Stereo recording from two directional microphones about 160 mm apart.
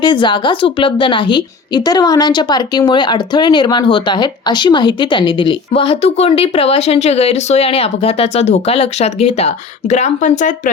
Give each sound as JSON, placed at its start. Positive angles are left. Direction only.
{"t": 0.0, "sound": "a woman's voice", "side_deg": 30}